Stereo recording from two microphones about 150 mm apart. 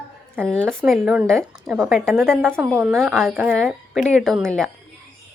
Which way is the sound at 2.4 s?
15° right (ahead or behind).